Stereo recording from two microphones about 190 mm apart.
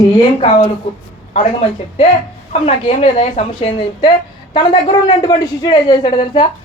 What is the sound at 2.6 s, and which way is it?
A woman's voice, 35° left (ahead or behind).